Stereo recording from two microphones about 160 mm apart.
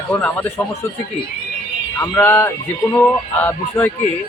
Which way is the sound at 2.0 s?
15° left (ahead or behind).